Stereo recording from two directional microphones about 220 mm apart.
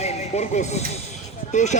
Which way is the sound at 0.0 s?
30° left (ahead or behind).